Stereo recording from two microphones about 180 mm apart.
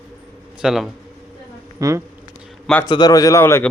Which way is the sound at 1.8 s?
20° right (ahead or behind).